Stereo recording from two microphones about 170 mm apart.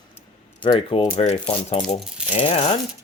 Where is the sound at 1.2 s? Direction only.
40° left (ahead or behind).